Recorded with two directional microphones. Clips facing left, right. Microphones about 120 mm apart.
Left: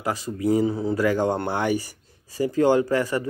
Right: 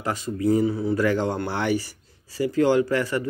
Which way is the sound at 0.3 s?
15° left (ahead or behind).